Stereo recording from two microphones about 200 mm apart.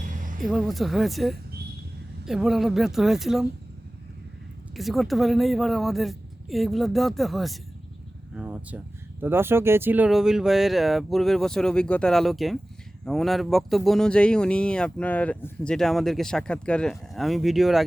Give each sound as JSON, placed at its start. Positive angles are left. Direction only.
{"t": 0.0, "sound": "a sound", "side_deg": -40}
{"t": 0.4, "sound": "speech", "side_deg": 0}
{"t": 4.7, "sound": "speech", "side_deg": 0}